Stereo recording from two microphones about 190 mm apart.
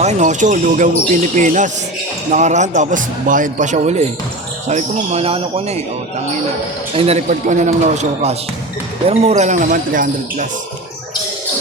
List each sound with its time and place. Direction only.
0.0 s a man's voice: 40° right (ahead or behind)
6.9 s a man's voice: 30° right (ahead or behind)